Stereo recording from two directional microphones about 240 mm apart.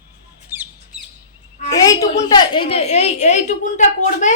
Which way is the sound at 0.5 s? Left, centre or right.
Centre.